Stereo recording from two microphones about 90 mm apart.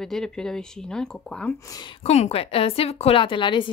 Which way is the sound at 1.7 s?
50° left (ahead or behind).